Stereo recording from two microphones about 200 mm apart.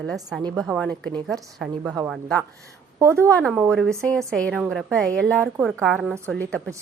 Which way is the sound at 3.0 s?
15° right (ahead or behind).